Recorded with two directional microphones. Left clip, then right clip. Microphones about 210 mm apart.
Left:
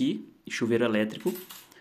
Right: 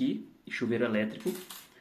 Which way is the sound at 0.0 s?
40° left (ahead or behind).